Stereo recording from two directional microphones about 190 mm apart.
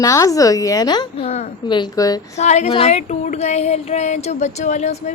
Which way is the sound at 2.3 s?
35° left (ahead or behind).